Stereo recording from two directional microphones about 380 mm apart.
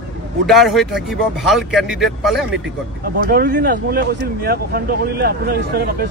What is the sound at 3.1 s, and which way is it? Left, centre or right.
Speech, right.